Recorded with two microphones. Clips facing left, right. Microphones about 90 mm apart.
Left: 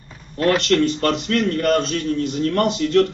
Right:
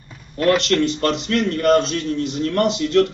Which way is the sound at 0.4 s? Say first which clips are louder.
Even; 35° left (ahead or behind).